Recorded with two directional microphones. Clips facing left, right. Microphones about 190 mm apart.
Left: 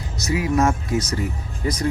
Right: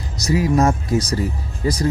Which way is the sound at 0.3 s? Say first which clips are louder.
Right 3 dB; 35° right (ahead or behind).